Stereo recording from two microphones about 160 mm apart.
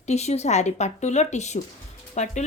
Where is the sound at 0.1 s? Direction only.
45° left (ahead or behind).